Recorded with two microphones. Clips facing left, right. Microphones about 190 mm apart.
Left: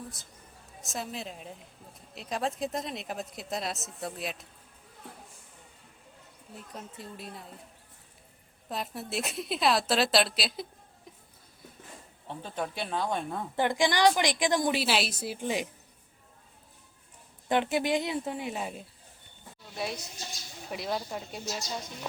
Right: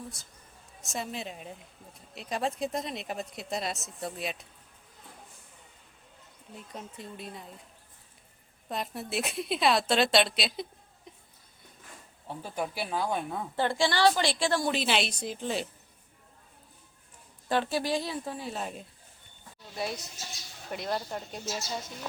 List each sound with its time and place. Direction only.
0.1 s a woman's voice: centre (ahead or behind)
6.5 s a woman's voice: centre (ahead or behind)
8.7 s a woman's voice: centre (ahead or behind)
12.3 s a woman's voice: 10° right (ahead or behind)
13.6 s a woman's voice: 15° left (ahead or behind)
17.5 s a woman's voice: 20° left (ahead or behind); by 21.7 s centre (ahead or behind)